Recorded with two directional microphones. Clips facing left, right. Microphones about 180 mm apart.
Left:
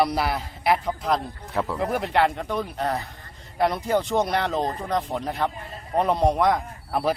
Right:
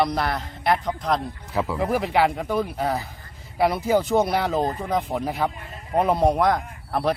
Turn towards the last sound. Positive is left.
turn(degrees=0)  # may be behind; listen again after turning